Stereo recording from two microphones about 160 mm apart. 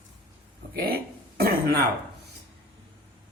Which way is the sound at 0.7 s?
70° right (ahead or behind).